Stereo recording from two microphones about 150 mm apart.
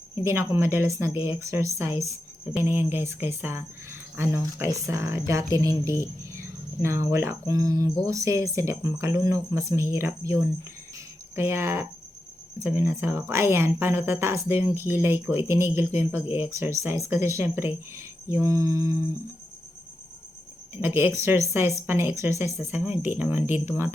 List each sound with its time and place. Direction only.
0.3 s a woman's voice: 15° right (ahead or behind)
10.9 s a sound: 20° right (ahead or behind)
12.5 s a woman's voice: 20° right (ahead or behind)
20.8 s a woman's voice: 15° right (ahead or behind)